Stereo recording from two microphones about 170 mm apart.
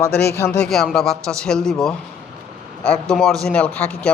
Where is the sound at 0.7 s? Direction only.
Centre (ahead or behind).